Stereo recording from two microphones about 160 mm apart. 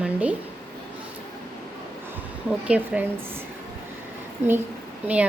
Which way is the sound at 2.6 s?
10° right (ahead or behind).